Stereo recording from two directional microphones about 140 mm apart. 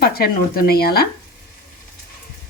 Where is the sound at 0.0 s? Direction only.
90° left.